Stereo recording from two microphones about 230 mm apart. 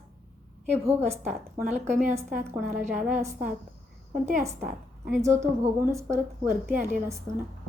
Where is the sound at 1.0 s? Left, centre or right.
Centre.